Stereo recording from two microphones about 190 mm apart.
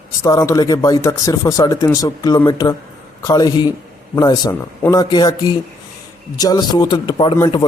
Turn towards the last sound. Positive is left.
turn(degrees=25)  # may be behind; listen again after turning